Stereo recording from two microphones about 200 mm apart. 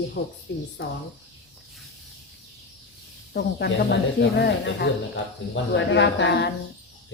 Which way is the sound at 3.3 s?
60° left (ahead or behind).